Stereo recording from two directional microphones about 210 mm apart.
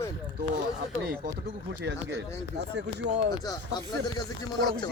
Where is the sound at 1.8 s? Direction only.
55° right (ahead or behind).